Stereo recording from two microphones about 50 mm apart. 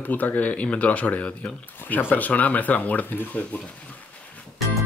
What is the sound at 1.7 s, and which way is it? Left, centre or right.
Speech, left.